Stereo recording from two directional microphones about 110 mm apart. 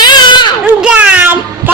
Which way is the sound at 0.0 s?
45° left (ahead or behind).